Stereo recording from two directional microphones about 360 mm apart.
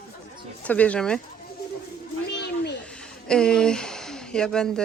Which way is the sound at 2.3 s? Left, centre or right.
Left.